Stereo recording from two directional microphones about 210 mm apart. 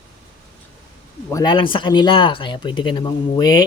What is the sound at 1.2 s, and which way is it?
Speech, 15° left (ahead or behind).